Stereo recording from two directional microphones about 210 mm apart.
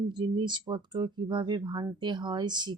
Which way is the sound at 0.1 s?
20° right (ahead or behind).